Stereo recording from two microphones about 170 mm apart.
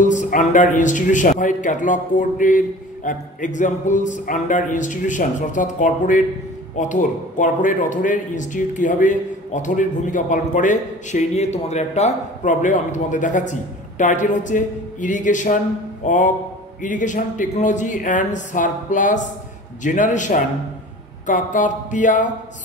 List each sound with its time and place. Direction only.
0.0 s a man's voice: 45° left (ahead or behind)